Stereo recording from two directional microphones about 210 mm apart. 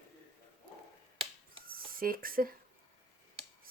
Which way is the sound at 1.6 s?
45° right (ahead or behind).